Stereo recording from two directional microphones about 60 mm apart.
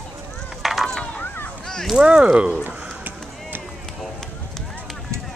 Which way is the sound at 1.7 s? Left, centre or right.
Centre.